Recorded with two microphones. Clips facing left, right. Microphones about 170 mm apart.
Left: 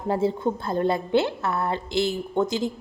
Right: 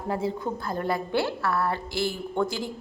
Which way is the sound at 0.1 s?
30° left (ahead or behind).